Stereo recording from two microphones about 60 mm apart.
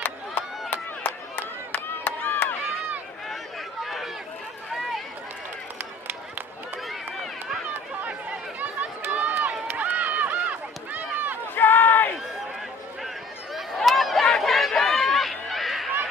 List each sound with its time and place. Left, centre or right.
0.7 s a sound: left
3.8 s run: centre
7.7 s chatter: right
10.9 s run: right
11.5 s a sound: left
13.6 s chatter: centre